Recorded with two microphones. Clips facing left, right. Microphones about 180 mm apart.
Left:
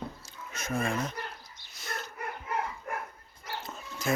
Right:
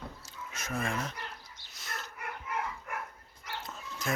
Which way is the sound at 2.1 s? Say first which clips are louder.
Left 3 dB; 35° left (ahead or behind).